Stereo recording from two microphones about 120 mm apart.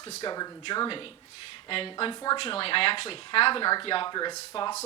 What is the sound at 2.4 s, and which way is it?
Speech, 50° left (ahead or behind).